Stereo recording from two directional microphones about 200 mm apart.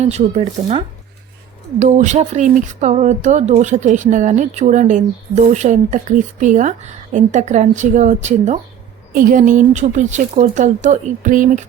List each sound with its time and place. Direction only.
0.0 s speech: 35° right (ahead or behind)